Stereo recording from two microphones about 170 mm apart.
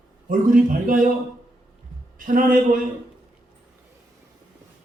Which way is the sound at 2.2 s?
55° right (ahead or behind).